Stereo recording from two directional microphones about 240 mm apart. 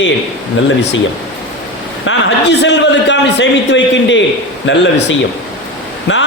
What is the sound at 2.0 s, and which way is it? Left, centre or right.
A man's voice, left.